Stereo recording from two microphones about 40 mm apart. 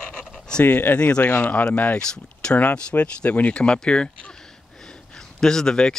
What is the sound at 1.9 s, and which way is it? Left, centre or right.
Speech, left.